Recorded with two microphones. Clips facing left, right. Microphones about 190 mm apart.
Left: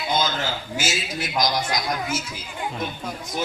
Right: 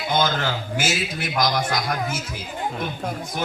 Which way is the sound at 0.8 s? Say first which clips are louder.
Right 1 dB; 60° right (ahead or behind).